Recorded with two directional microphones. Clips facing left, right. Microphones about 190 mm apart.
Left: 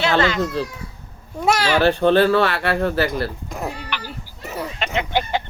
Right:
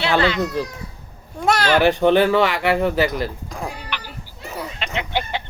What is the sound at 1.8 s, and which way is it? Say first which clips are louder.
Speech: left 1 dB; 15° right (ahead or behind).